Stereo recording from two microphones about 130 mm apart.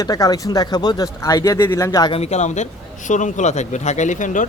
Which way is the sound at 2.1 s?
55° left (ahead or behind).